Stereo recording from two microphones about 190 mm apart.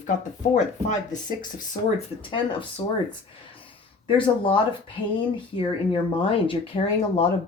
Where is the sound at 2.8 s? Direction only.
25° left (ahead or behind).